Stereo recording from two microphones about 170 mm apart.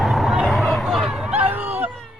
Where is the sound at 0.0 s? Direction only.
Centre (ahead or behind).